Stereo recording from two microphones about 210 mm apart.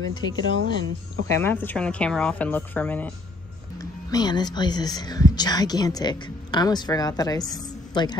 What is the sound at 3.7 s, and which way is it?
Speech, 20° left (ahead or behind).